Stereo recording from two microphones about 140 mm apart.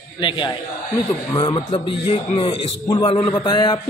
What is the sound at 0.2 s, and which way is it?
A man's voice, 35° left (ahead or behind).